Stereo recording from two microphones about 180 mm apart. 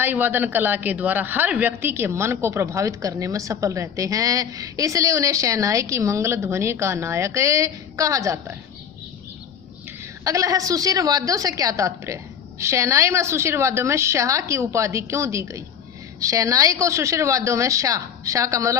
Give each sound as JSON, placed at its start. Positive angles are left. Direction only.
{"t": 0.0, "sound": "speech", "side_deg": -10}
{"t": 10.2, "sound": "speech", "side_deg": -20}